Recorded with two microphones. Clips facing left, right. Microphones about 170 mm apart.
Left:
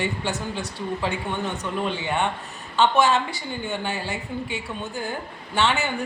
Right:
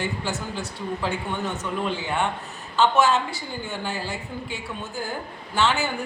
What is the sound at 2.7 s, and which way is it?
Speech, 5° right (ahead or behind).